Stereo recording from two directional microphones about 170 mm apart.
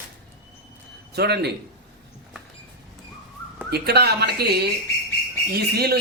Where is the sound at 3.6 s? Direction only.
70° right (ahead or behind).